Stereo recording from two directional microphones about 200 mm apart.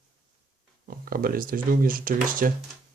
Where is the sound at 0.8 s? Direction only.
45° right (ahead or behind).